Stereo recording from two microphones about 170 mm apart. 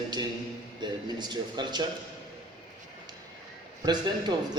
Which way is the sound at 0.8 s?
25° right (ahead or behind).